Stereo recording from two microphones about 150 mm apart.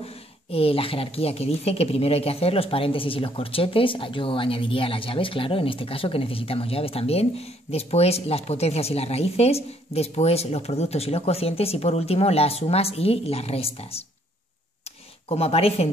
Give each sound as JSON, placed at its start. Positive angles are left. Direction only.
{"t": 0.0, "sound": "a woman's voice", "side_deg": 40}
{"t": 15.2, "sound": "a woman's voice", "side_deg": 40}